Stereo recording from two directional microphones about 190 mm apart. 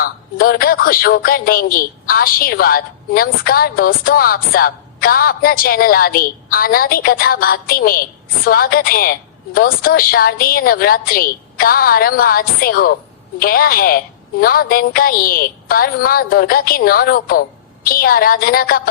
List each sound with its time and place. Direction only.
0.0 s a woman's voice: 50° left (ahead or behind)